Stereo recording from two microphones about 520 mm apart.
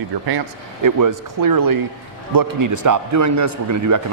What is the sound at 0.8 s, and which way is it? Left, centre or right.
Speech, right.